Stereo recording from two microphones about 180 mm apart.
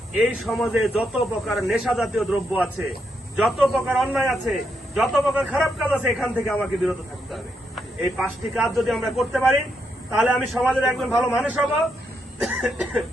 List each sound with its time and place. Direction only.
0.2 s a man's voice: centre (ahead or behind)